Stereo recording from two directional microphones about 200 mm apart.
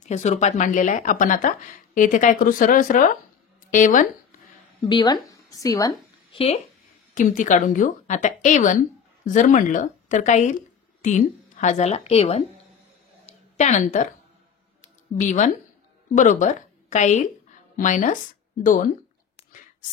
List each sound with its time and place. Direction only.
0.0 s speech: 35° left (ahead or behind)
4.8 s speech: 20° left (ahead or behind)
6.3 s speech: 30° left (ahead or behind)
13.2 s a sound: 35° left (ahead or behind)
16.2 s speech: 40° left (ahead or behind)